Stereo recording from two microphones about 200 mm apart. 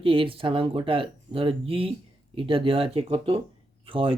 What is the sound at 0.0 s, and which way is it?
Speech, 25° right (ahead or behind).